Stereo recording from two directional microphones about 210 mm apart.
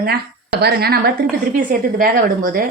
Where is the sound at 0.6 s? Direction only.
50° right (ahead or behind).